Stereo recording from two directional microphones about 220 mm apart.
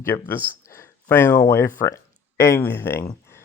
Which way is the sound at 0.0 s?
10° left (ahead or behind).